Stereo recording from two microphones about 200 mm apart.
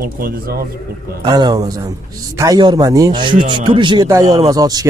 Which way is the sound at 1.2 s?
20° right (ahead or behind).